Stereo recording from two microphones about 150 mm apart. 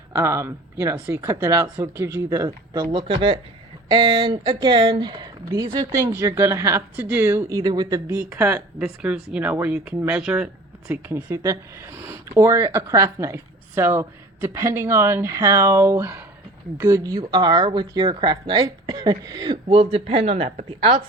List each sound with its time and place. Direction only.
0.1 s speech: 20° right (ahead or behind)
3.1 s a woman's voice: 35° right (ahead or behind)
5.5 s speech: 20° right (ahead or behind)
7.6 s a woman's voice: 30° right (ahead or behind)